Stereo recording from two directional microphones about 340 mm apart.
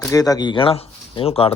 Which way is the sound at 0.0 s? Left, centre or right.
Centre.